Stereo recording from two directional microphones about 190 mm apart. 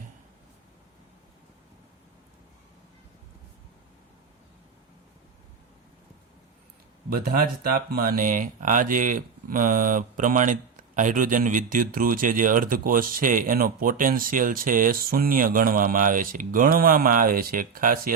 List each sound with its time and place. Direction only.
7.1 s speech: 50° right (ahead or behind)